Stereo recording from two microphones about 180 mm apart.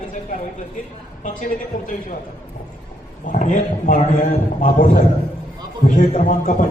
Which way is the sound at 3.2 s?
45° left (ahead or behind).